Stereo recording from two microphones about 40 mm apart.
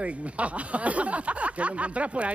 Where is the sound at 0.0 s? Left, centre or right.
Right.